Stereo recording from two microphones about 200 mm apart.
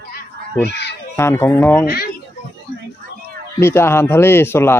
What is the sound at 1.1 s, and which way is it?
Speech, 15° left (ahead or behind).